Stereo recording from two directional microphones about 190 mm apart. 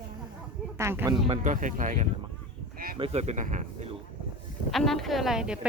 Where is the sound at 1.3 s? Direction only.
40° right (ahead or behind).